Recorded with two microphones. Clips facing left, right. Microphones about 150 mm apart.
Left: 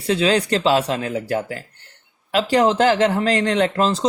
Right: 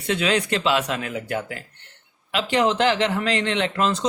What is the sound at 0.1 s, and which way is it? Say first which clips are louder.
Speech: left 4 dB; 35° left (ahead or behind).